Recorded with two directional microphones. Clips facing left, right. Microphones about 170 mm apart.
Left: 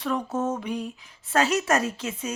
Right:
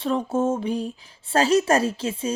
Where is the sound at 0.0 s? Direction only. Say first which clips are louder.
Right 4 dB; 25° right (ahead or behind).